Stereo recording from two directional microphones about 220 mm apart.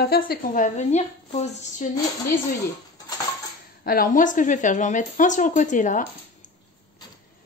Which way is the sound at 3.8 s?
40° left (ahead or behind).